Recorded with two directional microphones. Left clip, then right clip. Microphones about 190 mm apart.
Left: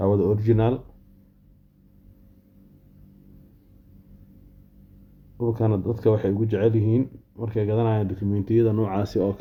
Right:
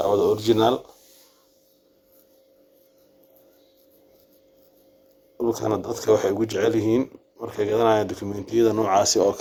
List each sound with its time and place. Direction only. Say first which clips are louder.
0.2 s speech: right 3 dB; 25° right (ahead or behind)
5.5 s speech: right 1 dB; 25° right (ahead or behind)